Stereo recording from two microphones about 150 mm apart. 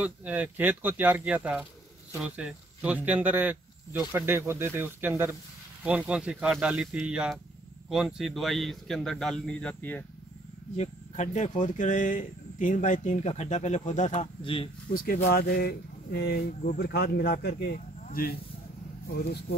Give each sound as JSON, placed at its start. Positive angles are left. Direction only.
{"t": 0.0, "sound": "a man's voice", "side_deg": -10}
{"t": 10.8, "sound": "speech", "side_deg": 50}
{"t": 14.4, "sound": "speech", "side_deg": 35}
{"t": 14.9, "sound": "speech", "side_deg": 75}
{"t": 15.2, "sound": "speech", "side_deg": 90}